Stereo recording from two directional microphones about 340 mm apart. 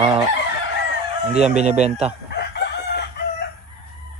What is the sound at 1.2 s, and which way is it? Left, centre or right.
Speech, centre.